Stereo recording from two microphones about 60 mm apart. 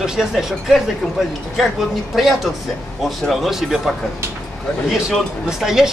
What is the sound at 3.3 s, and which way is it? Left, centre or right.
A man's voice, centre.